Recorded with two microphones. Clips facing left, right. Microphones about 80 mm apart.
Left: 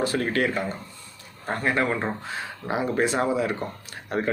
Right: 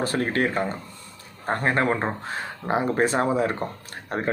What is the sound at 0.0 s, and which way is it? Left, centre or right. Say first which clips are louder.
Speech: even; right.